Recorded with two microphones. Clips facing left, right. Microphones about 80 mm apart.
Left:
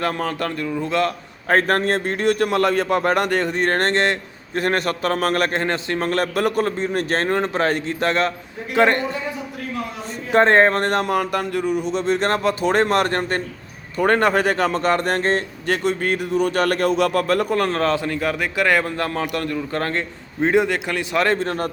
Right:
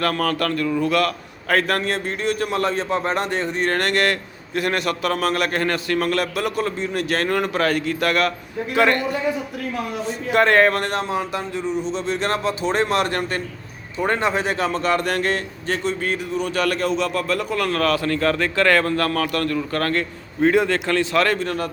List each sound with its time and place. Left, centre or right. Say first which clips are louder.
0.0 s a man's voice: right 2 dB; left
4.5 s a man's voice: left 1 dB; left
5.5 s a man's voice: right 1 dB; left
10.3 s speech: left 2 dB; left
11.9 s speech: left 3 dB; left
15.6 s a man's voice: left 1 dB; left; by 21.3 s centre
21.3 s a man's voice: left 1 dB; left